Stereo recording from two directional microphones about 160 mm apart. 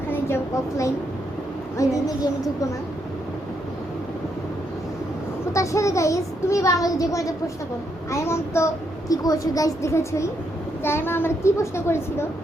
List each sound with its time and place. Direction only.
1.8 s a child's voice: 20° left (ahead or behind)
5.5 s a child's voice: 20° left (ahead or behind)